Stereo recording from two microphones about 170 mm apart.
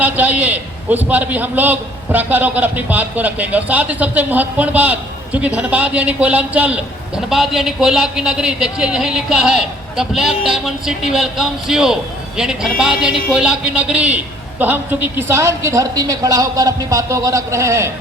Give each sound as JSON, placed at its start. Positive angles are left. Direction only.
{"t": 0.0, "sound": "a man's voice", "side_deg": -10}